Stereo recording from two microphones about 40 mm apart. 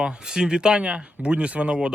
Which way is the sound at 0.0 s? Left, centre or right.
Centre.